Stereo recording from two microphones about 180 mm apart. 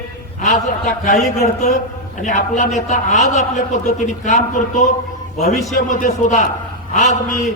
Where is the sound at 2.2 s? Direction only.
40° left (ahead or behind).